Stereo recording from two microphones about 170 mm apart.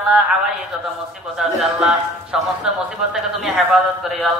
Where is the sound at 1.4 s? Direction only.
Centre (ahead or behind).